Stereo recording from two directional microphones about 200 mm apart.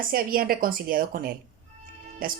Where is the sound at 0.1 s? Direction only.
45° right (ahead or behind).